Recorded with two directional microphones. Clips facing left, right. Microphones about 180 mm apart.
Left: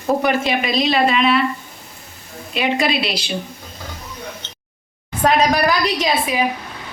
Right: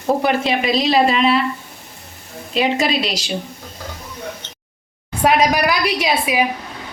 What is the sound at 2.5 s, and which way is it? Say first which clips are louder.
Speech: right 1 dB; 35° right (ahead or behind).